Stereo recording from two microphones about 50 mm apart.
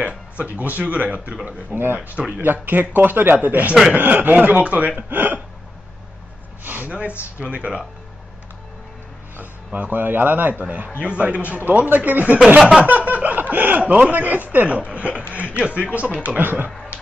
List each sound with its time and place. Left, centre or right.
0.6 s speech: right
1.7 s a man's voice: right
5.1 s speech: right
6.6 s a sound: right
7.3 s speech: right
9.4 s speech: right
12.5 s a sound: centre
12.8 s speech: right
16.3 s a man's voice: right